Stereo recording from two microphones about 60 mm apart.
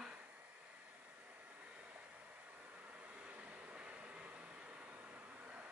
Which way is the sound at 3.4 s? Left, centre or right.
Right.